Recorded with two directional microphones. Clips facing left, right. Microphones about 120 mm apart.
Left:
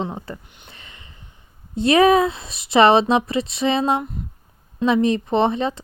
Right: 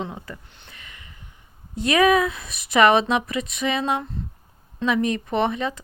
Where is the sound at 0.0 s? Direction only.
30° left (ahead or behind).